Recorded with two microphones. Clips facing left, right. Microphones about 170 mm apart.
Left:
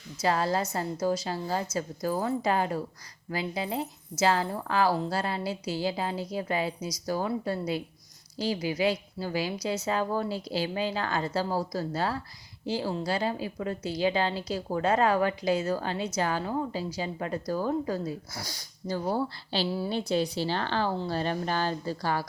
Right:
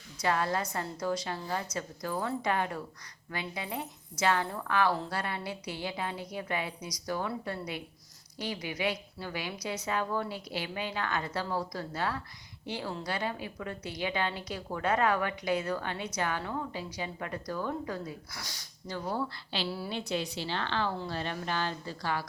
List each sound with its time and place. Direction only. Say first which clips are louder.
0.2 s a woman's voice: left 3 dB; 30° left (ahead or behind)
19.6 s a woman's voice: left 5 dB; 20° left (ahead or behind)
19.9 s a woman's voice: left 6 dB; 35° left (ahead or behind)